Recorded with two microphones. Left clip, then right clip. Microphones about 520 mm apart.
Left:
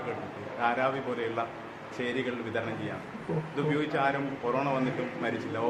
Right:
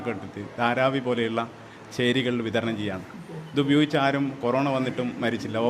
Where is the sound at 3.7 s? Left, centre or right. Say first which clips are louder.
Right 6 dB; right.